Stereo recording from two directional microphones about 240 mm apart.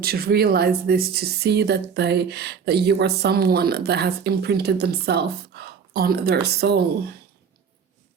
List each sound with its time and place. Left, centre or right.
0.0 s speech: right